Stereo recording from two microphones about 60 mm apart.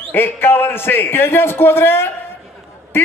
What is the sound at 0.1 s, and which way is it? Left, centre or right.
A man's voice, left.